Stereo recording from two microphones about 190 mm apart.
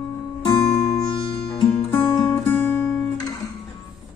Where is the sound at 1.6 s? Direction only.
25° left (ahead or behind).